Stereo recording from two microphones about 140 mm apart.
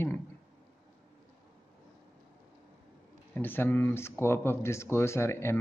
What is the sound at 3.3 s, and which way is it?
Speech, 15° left (ahead or behind).